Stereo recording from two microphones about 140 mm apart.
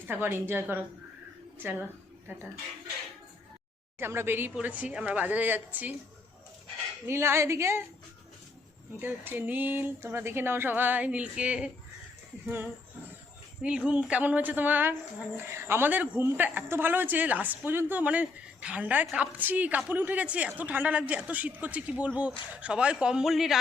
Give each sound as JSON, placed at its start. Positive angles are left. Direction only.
{"t": 0.1, "sound": "speech", "side_deg": -15}
{"t": 3.9, "sound": "speech", "side_deg": -15}
{"t": 7.1, "sound": "a woman's voice", "side_deg": -20}
{"t": 9.0, "sound": "speech", "side_deg": -15}